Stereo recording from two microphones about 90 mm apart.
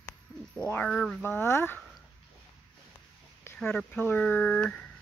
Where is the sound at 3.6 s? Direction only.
10° left (ahead or behind).